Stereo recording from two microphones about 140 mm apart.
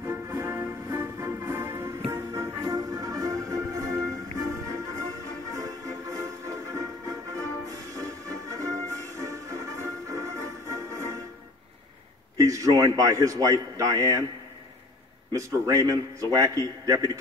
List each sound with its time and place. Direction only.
0.0 s music: 20° right (ahead or behind)
12.4 s a man's voice: 25° right (ahead or behind)
15.3 s a man's voice: 25° right (ahead or behind)